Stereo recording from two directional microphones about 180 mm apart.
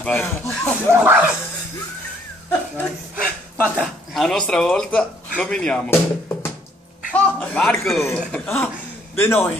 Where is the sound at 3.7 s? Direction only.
Centre (ahead or behind).